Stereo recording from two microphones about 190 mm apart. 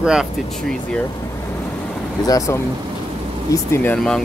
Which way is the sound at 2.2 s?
20° left (ahead or behind).